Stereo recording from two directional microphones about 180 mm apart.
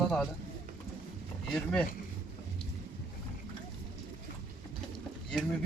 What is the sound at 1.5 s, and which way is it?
Speech, 5° left (ahead or behind).